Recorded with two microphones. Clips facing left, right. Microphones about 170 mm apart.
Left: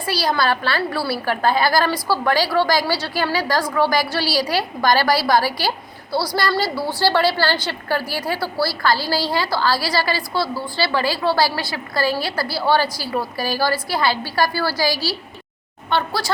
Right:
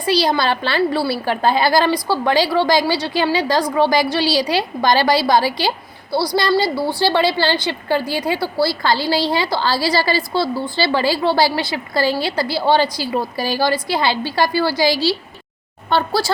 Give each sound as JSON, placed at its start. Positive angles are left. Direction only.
{"t": 0.0, "sound": "a woman's voice", "side_deg": -20}
{"t": 15.9, "sound": "speech", "side_deg": -35}